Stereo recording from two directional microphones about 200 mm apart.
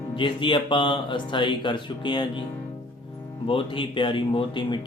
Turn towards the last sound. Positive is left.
turn(degrees=25)  # may be behind; listen again after turning